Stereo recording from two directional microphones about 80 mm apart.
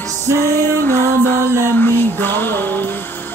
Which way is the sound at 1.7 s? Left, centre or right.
Left.